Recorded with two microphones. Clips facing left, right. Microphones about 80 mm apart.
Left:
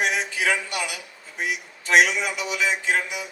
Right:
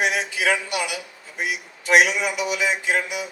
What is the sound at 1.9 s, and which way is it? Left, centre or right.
A man's voice, centre.